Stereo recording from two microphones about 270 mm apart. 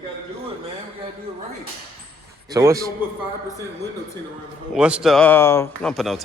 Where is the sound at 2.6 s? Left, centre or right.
Centre.